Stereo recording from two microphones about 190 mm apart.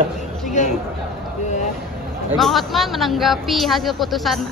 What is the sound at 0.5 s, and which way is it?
Chatter, 40° left (ahead or behind).